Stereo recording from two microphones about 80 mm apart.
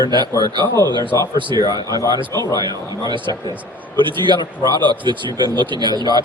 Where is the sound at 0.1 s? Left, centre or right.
Right.